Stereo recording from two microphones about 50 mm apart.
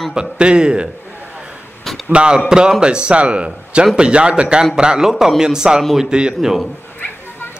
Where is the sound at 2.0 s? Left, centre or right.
Right.